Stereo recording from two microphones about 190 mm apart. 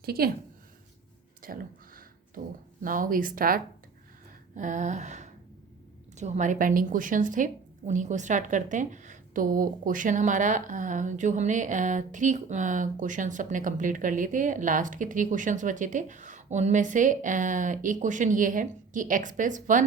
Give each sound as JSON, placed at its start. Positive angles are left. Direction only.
{"t": 0.0, "sound": "a woman's voice", "side_deg": -55}
{"t": 1.4, "sound": "speech", "side_deg": -50}
{"t": 2.8, "sound": "speech", "side_deg": -45}
{"t": 4.5, "sound": "a sound", "side_deg": -40}
{"t": 6.1, "sound": "a woman's voice", "side_deg": -40}